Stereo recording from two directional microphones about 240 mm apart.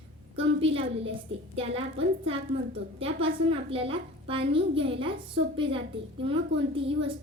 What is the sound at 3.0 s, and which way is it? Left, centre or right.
A woman's voice, right.